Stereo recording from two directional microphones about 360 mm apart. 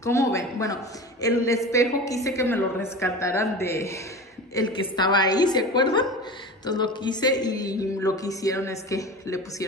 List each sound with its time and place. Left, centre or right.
0.0 s a man's voice: centre